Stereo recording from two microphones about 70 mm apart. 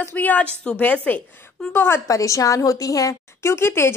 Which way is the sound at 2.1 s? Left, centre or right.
Left.